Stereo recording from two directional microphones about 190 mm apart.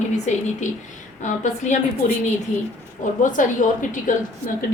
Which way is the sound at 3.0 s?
45° left (ahead or behind).